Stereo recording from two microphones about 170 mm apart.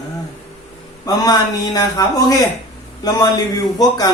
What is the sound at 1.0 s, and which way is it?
A man's voice, 20° left (ahead or behind).